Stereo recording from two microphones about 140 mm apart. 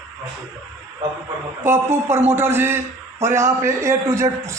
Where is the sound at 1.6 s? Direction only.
15° right (ahead or behind).